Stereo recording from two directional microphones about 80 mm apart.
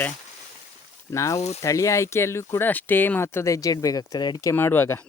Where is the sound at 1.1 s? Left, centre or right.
Left.